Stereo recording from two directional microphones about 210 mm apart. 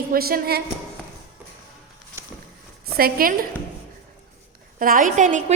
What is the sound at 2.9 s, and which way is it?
Speech, 45° right (ahead or behind).